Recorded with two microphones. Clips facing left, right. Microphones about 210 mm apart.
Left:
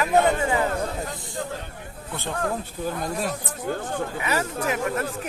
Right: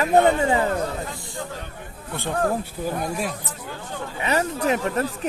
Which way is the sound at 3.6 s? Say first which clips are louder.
Left 6 dB; 50° left (ahead or behind).